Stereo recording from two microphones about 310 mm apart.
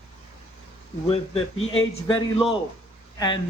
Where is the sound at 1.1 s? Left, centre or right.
Centre.